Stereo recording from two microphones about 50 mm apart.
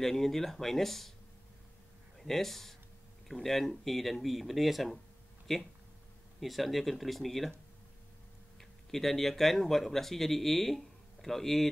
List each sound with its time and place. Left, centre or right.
0.0 s speech: centre
2.1 s speech: centre
8.5 s speech: centre